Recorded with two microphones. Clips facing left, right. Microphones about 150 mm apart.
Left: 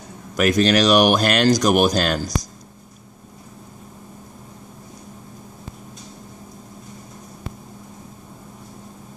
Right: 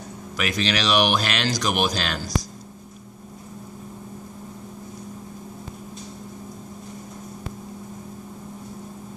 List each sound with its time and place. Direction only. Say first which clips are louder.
0.4 s speech: left 9 dB; 45° left (ahead or behind)